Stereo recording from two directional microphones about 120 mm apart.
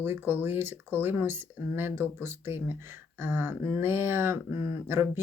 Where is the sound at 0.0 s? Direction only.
20° right (ahead or behind).